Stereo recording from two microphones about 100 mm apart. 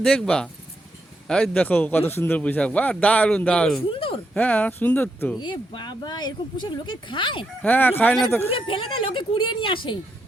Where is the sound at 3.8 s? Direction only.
60° left (ahead or behind).